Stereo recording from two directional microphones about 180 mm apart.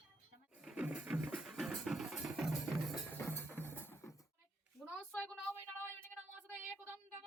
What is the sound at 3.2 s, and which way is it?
Music, 10° left (ahead or behind).